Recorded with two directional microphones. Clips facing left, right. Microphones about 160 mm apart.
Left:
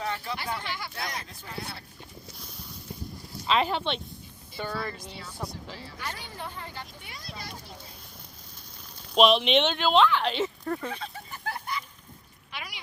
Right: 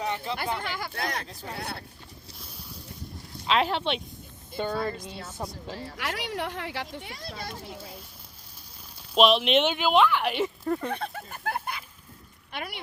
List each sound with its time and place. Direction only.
0.0 s a sound: 20° right (ahead or behind)
0.5 s speech: 50° right (ahead or behind)
3.4 s speech: centre (ahead or behind)
4.5 s speech: 25° right (ahead or behind)
6.0 s speech: 90° right; by 7.5 s 60° right (ahead or behind)
9.1 s speech: centre (ahead or behind)
10.9 s a sound: 60° right (ahead or behind)
12.5 s speech: 55° right (ahead or behind)